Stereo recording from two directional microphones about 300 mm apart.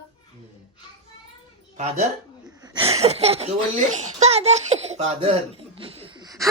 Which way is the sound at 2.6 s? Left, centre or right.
Centre.